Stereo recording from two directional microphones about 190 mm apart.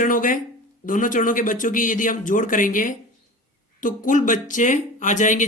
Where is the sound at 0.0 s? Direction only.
45° left (ahead or behind).